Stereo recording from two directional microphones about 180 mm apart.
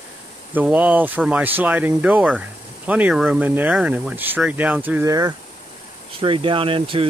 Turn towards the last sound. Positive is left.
turn(degrees=-30)  # may be behind; listen again after turning